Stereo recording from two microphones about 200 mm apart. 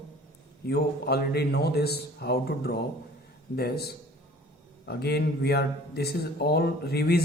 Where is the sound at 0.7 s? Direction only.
50° left (ahead or behind).